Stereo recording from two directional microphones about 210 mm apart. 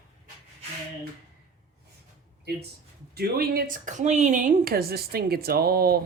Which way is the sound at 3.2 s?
45° right (ahead or behind).